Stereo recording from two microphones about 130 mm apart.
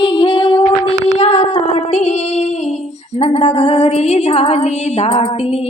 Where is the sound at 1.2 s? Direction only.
55° left (ahead or behind).